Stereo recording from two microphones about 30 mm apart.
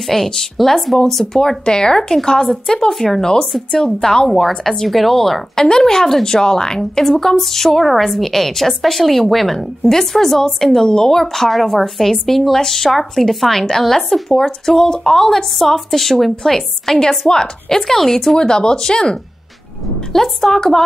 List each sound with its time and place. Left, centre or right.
0.0 s a woman's voice: centre
2.4 s a woman's voice: centre
3.8 s a woman's voice: left
4.3 s a woman's voice: centre
17.3 s a woman's voice: left
20.1 s a woman's voice: centre